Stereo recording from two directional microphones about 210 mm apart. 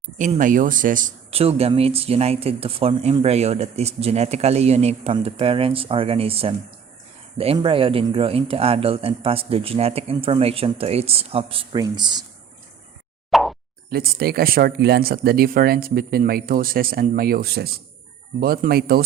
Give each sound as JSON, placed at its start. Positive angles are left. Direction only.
{"t": 0.2, "sound": "speech", "side_deg": -40}
{"t": 13.3, "sound": "plop", "side_deg": 0}
{"t": 13.9, "sound": "speech", "side_deg": -45}